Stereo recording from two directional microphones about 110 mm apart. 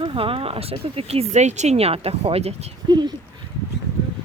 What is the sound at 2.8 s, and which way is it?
Speech, 40° right (ahead or behind).